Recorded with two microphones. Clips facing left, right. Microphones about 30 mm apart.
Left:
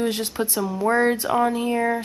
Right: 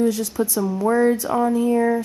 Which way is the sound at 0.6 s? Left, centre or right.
Left.